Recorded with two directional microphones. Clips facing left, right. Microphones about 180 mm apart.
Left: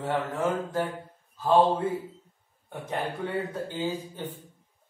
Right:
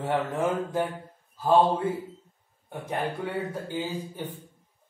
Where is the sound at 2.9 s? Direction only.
10° right (ahead or behind).